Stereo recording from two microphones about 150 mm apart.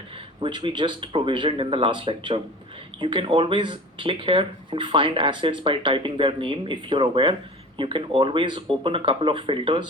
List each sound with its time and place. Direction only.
0.3 s speech: 35° right (ahead or behind)